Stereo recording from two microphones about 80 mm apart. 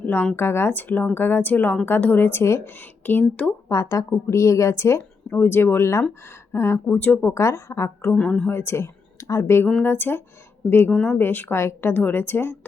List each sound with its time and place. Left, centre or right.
0.0 s speech: left
3.1 s speech: left
3.7 s a woman's voice: left
7.4 s a woman's voice: left
8.1 s a woman's voice: centre
8.4 s speech: left
10.9 s a woman's voice: centre
11.2 s speech: left